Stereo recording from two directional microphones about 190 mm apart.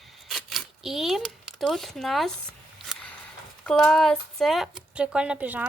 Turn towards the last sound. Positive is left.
turn(degrees=-10)  # may be behind; listen again after turning